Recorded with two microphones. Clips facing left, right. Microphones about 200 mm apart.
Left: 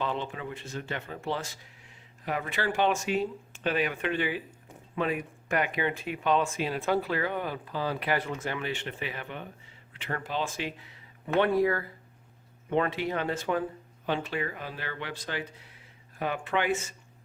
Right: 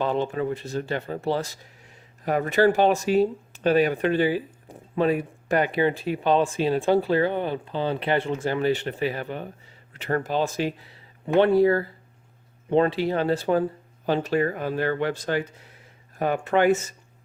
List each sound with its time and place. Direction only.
0.0 s speech: 40° right (ahead or behind)